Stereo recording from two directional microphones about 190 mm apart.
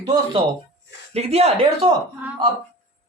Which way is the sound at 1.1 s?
35° right (ahead or behind).